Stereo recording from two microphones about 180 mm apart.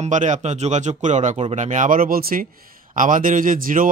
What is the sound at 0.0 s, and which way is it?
Speech, 40° right (ahead or behind).